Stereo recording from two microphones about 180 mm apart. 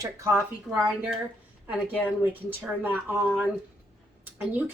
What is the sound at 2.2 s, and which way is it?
A woman's voice, 10° right (ahead or behind).